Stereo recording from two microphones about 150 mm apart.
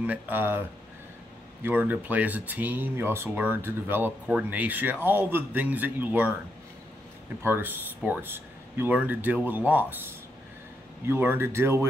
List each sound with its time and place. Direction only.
0.0 s speech: 10° right (ahead or behind)
7.4 s speech: 15° right (ahead or behind)
11.1 s speech: 15° right (ahead or behind)